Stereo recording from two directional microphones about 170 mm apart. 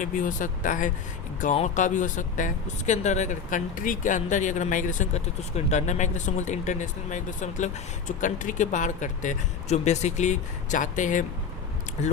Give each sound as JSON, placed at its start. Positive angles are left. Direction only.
{"t": 0.0, "sound": "speech", "side_deg": 50}